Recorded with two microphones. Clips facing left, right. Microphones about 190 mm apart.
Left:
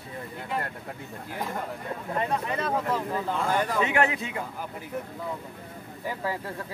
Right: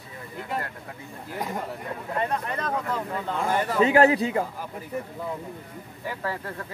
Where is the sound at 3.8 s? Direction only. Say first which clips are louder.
Right 7 dB; 35° right (ahead or behind).